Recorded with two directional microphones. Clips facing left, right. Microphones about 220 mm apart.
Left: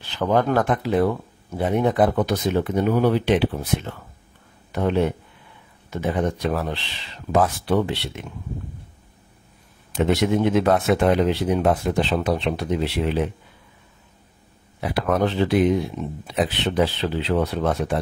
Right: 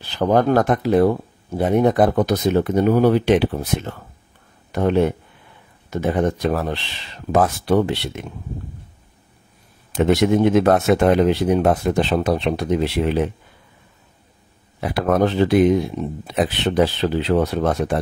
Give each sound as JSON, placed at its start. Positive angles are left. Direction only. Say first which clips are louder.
{"t": 0.1, "sound": "speech", "louder": "right 4 dB", "side_deg": -40}
{"t": 9.9, "sound": "speech", "louder": "right 4 dB", "side_deg": -45}
{"t": 14.8, "sound": "speech", "louder": "right 3 dB", "side_deg": -45}